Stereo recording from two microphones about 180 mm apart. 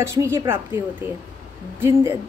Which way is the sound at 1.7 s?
15° right (ahead or behind).